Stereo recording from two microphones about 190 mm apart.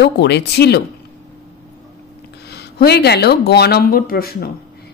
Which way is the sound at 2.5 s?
60° left (ahead or behind).